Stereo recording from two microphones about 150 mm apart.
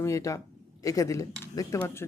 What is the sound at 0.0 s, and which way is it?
Speech, 20° left (ahead or behind).